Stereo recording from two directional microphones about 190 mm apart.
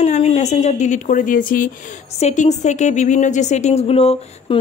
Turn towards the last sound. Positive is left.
turn(degrees=35)  # may be behind; listen again after turning